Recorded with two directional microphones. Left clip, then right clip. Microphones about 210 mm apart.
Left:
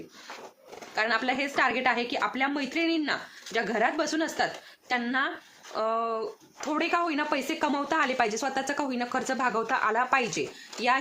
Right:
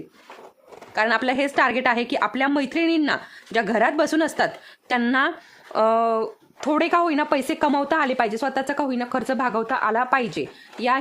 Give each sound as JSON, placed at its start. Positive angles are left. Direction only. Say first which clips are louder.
{"t": 0.9, "sound": "a woman's voice", "louder": "right 6 dB", "side_deg": -45}